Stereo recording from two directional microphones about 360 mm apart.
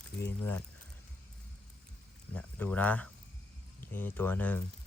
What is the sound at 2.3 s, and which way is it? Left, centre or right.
Speech, centre.